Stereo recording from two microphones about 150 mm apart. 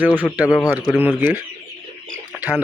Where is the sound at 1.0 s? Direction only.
15° right (ahead or behind).